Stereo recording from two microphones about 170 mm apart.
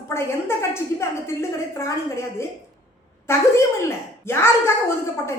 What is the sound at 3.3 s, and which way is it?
A woman's voice, 15° left (ahead or behind).